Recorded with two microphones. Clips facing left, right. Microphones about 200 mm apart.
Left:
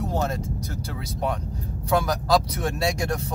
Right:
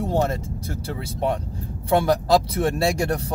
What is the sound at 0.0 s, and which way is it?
Speech, 30° right (ahead or behind).